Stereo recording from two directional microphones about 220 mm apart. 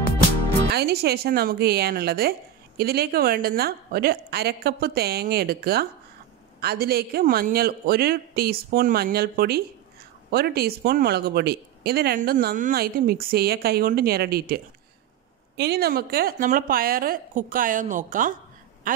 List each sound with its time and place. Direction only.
0.7 s speech: 45° right (ahead or behind)